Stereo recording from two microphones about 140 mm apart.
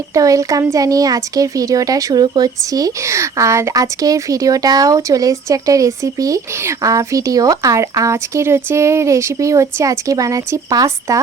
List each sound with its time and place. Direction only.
0.1 s speech: 25° right (ahead or behind)